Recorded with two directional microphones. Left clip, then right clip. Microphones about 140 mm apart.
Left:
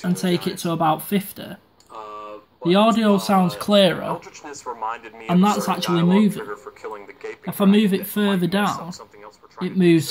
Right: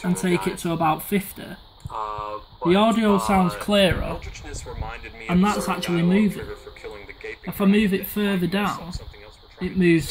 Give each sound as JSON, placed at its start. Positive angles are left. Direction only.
{"t": 0.0, "sound": "speech", "side_deg": 0}
{"t": 5.3, "sound": "speech", "side_deg": 0}
{"t": 6.3, "sound": "speech", "side_deg": -50}
{"t": 6.8, "sound": "radio", "side_deg": -20}
{"t": 7.4, "sound": "speech", "side_deg": 5}